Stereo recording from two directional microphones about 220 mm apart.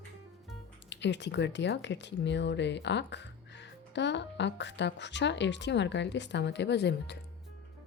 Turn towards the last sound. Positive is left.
turn(degrees=50)  # may be behind; listen again after turning